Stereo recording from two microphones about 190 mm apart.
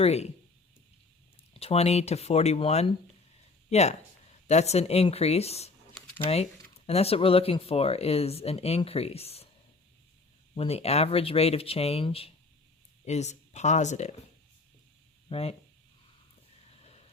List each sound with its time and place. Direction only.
0.0 s speech: 35° left (ahead or behind)
1.5 s speech: 30° left (ahead or behind)
10.5 s speech: 30° left (ahead or behind)
15.3 s speech: 30° left (ahead or behind)
16.8 s a sound: 35° left (ahead or behind)